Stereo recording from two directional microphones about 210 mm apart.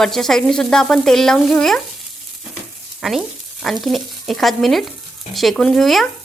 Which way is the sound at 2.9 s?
Centre (ahead or behind).